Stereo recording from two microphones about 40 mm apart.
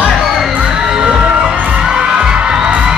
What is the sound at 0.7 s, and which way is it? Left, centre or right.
Music, centre.